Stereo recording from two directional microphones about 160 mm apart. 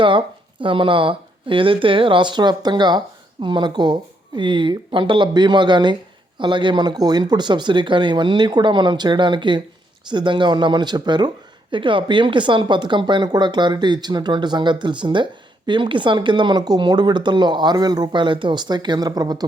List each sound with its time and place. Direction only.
0.0 s speech: 30° right (ahead or behind)